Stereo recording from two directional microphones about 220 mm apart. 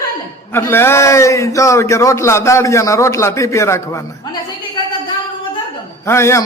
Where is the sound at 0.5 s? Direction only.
10° left (ahead or behind).